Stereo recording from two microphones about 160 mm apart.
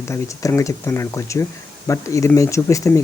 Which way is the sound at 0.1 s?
20° left (ahead or behind).